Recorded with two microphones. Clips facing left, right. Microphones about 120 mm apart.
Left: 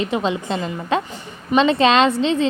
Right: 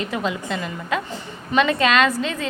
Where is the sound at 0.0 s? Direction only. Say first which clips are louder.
Left 4 dB; 25° left (ahead or behind).